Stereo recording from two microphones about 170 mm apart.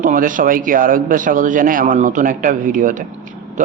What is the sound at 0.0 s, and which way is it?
Speech, 50° right (ahead or behind).